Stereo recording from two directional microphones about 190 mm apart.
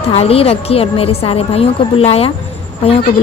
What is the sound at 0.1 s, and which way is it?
A woman's voice, 30° left (ahead or behind).